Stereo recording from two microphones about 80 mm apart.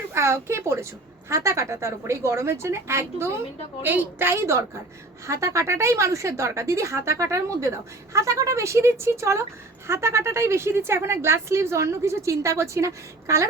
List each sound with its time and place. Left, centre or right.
0.1 s speech: right